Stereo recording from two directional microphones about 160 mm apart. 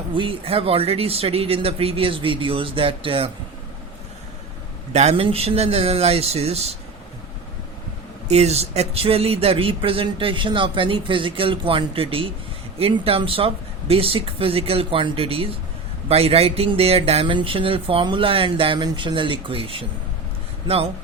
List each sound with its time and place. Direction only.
0.1 s speech: 35° right (ahead or behind)
4.9 s speech: 45° right (ahead or behind)
8.3 s speech: 40° right (ahead or behind)